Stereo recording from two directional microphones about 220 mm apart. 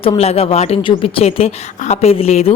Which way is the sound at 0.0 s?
25° left (ahead or behind).